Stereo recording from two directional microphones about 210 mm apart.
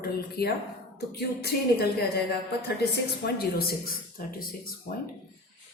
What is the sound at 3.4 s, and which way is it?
Speech, 45° left (ahead or behind).